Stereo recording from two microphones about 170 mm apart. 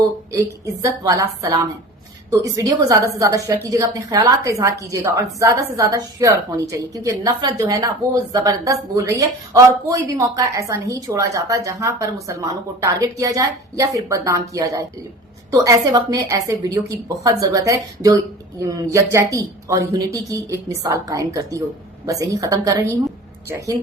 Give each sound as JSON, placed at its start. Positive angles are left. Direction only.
{"t": 0.3, "sound": "a woman's voice", "side_deg": -20}